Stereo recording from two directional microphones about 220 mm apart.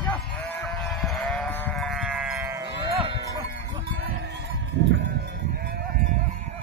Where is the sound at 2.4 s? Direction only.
20° right (ahead or behind).